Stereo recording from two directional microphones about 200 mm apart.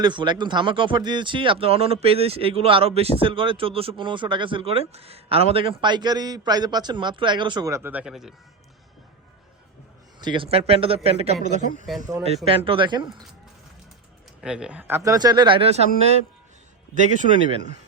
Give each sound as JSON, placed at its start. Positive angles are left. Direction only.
{"t": 0.0, "sound": "speech", "side_deg": -25}
{"t": 10.2, "sound": "speech", "side_deg": -25}
{"t": 12.5, "sound": "speech", "side_deg": -25}
{"t": 14.4, "sound": "speech", "side_deg": -5}
{"t": 16.9, "sound": "speech", "side_deg": -40}